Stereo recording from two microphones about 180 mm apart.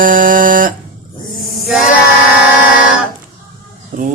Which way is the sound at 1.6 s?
Centre (ahead or behind).